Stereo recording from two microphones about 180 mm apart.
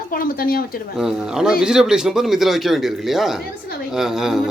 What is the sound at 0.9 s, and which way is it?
A man's voice, 5° right (ahead or behind).